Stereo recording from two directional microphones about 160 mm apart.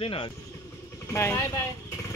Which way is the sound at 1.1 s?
15° left (ahead or behind).